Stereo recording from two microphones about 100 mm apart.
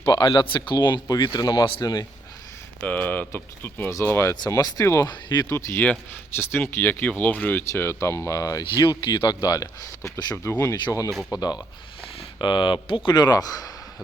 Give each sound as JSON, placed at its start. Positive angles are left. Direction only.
{"t": 0.0, "sound": "speech", "side_deg": 50}
{"t": 2.8, "sound": "speech", "side_deg": 15}
{"t": 4.4, "sound": "speech", "side_deg": 40}
{"t": 5.0, "sound": "speech", "side_deg": 45}
{"t": 5.5, "sound": "speech", "side_deg": 25}
{"t": 7.7, "sound": "speech", "side_deg": 30}
{"t": 10.3, "sound": "speech", "side_deg": 20}
{"t": 11.1, "sound": "speech", "side_deg": 0}
{"t": 12.4, "sound": "speech", "side_deg": 50}
{"t": 13.1, "sound": "speech", "side_deg": 40}